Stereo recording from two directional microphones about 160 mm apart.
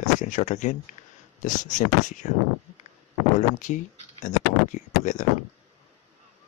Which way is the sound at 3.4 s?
50° left (ahead or behind).